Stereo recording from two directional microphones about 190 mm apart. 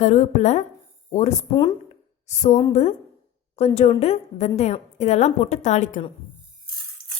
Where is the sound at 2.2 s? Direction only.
35° left (ahead or behind).